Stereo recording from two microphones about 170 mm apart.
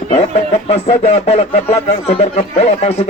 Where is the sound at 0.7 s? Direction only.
40° left (ahead or behind).